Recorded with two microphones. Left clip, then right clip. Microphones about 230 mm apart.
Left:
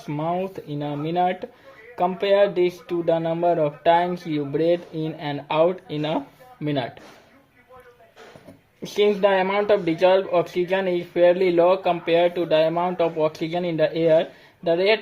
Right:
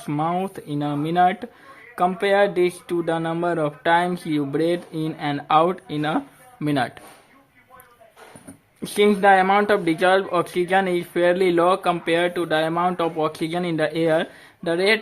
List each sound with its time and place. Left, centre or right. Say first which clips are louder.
0.0 s speech: right 2 dB; right
8.8 s speech: right 2 dB; right